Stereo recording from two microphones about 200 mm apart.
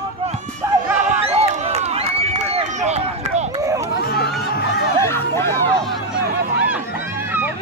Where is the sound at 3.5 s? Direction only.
15° right (ahead or behind).